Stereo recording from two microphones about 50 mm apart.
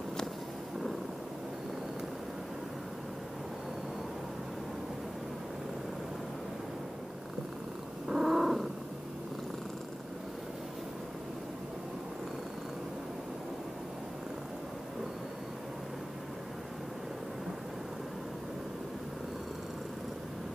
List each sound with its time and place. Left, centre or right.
8.1 s cat: centre